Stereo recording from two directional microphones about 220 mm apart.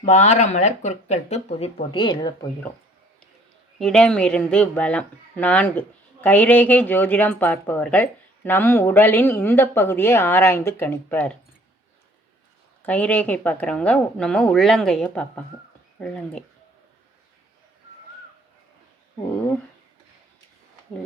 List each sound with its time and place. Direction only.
0.0 s speech: 30° left (ahead or behind)
3.8 s a woman's voice: centre (ahead or behind)
12.8 s a woman's voice: 5° left (ahead or behind)